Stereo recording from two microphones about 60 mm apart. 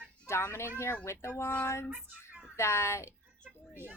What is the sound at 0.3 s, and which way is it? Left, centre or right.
A woman's voice, left.